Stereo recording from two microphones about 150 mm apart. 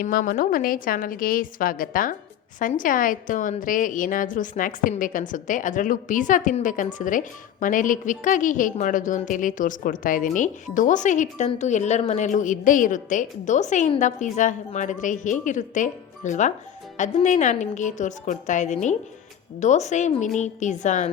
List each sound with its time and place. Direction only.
0.0 s a woman's voice: 70° left (ahead or behind); by 21.1 s 55° left (ahead or behind)